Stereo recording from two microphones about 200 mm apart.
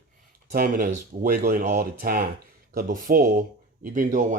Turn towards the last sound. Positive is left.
turn(degrees=-40)  # may be behind; listen again after turning